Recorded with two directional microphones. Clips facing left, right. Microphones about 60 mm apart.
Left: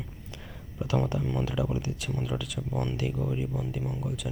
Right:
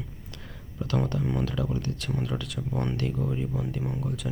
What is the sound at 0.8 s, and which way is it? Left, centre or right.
Speech, centre.